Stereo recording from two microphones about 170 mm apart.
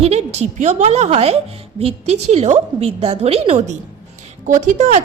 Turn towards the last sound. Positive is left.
turn(degrees=-45)  # may be behind; listen again after turning